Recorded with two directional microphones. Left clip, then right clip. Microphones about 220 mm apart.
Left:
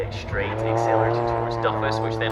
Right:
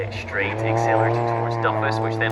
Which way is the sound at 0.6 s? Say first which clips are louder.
Even; 30° right (ahead or behind).